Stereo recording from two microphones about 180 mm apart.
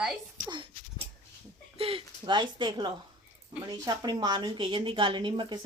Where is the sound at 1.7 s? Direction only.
30° right (ahead or behind).